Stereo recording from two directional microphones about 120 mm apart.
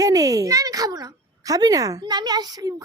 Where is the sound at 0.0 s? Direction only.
30° right (ahead or behind).